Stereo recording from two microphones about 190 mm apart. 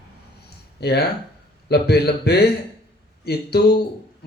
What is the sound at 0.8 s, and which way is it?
Speech, 60° left (ahead or behind).